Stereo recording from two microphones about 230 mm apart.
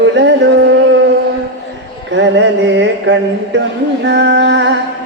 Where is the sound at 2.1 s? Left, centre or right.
Right.